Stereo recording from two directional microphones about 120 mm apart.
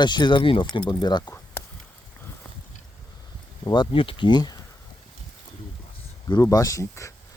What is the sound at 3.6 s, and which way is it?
Speech, 40° left (ahead or behind).